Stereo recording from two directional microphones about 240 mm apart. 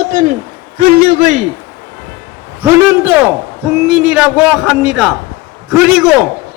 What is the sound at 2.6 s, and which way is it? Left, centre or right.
A man's voice, centre.